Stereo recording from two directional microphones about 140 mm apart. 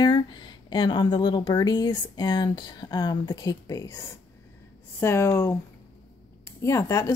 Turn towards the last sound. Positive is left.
turn(degrees=20)  # may be behind; listen again after turning